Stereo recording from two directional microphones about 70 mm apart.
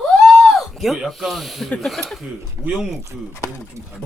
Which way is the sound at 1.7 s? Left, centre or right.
Centre.